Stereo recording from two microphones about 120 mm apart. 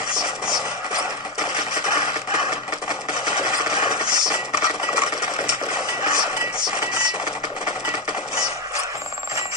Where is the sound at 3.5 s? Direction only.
35° right (ahead or behind).